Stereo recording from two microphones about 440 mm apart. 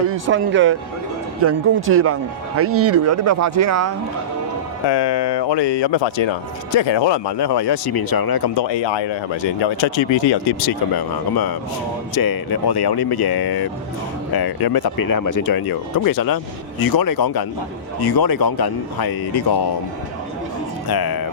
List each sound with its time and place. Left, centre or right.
0.1 s speech: right
4.9 s speech: left
20.8 s speech: left